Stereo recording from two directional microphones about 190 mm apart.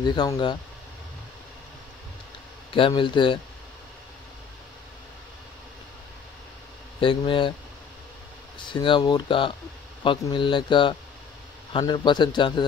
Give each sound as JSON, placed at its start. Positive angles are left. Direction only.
{"t": 0.0, "sound": "speech", "side_deg": 20}
{"t": 2.7, "sound": "speech", "side_deg": 25}
{"t": 7.0, "sound": "speech", "side_deg": 25}
{"t": 8.5, "sound": "speech", "side_deg": 25}